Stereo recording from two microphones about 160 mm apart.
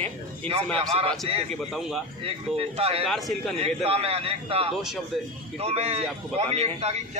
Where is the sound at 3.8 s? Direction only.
40° right (ahead or behind).